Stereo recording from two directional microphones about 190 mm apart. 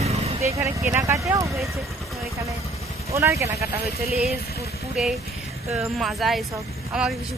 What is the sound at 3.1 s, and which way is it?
Speech, 15° right (ahead or behind).